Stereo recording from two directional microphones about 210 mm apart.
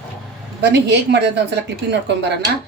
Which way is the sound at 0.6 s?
55° right (ahead or behind).